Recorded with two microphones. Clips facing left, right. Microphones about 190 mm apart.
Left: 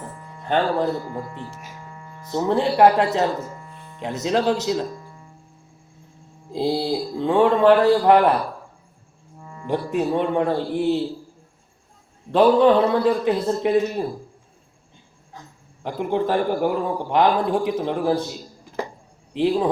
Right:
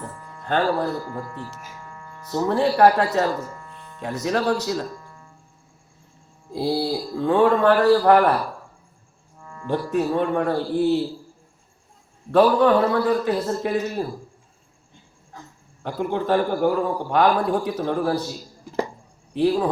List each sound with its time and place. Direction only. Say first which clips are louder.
0.1 s speech: left 2 dB; 20° left (ahead or behind)
6.5 s a man's voice: left 1 dB; 20° left (ahead or behind)
9.4 s a man's voice: even; 15° left (ahead or behind)
12.3 s a man's voice: left 1 dB; 20° left (ahead or behind)
15.8 s a man's voice: left 2 dB; 20° left (ahead or behind)